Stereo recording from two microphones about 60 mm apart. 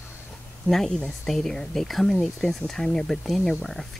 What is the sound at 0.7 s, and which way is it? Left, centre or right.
Speech, centre.